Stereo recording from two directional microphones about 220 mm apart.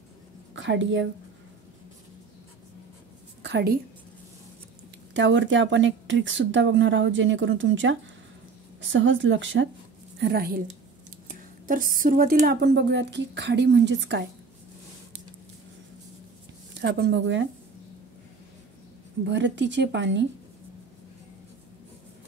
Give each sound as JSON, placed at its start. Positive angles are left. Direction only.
{"t": 0.6, "sound": "speech", "side_deg": -55}
{"t": 3.4, "sound": "a woman's voice", "side_deg": -50}
{"t": 5.1, "sound": "speech", "side_deg": -55}
{"t": 10.1, "sound": "a woman's voice", "side_deg": -45}
{"t": 11.6, "sound": "a woman's voice", "side_deg": -40}
{"t": 16.7, "sound": "speech", "side_deg": -50}
{"t": 19.2, "sound": "speech", "side_deg": -55}